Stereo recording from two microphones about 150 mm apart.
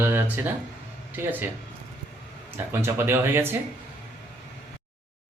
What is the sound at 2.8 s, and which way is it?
Speech, 15° right (ahead or behind).